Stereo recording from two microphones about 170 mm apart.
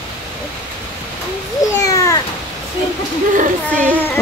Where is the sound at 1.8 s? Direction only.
20° left (ahead or behind).